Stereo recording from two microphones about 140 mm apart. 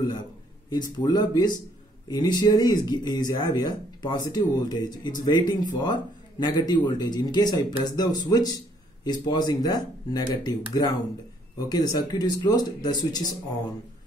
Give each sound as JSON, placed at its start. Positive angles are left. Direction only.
{"t": 0.7, "sound": "speech", "side_deg": 30}